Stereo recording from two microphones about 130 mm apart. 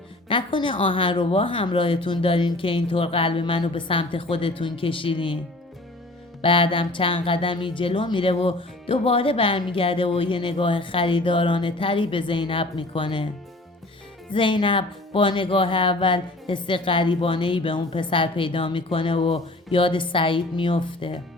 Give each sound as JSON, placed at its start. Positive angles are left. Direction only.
{"t": 0.3, "sound": "a woman's voice", "side_deg": 40}
{"t": 6.4, "sound": "speech", "side_deg": 45}
{"t": 14.3, "sound": "speech", "side_deg": 40}